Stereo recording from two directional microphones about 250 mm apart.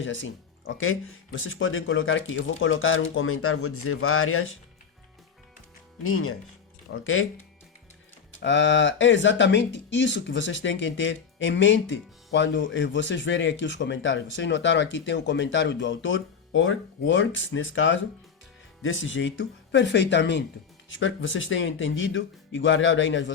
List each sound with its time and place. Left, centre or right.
0.0 s speech: left
6.0 s speech: left
8.4 s speech: left